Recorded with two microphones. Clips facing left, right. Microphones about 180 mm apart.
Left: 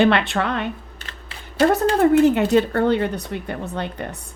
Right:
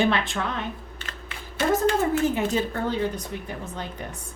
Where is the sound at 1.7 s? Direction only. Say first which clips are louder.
Left 4 dB; 65° left (ahead or behind).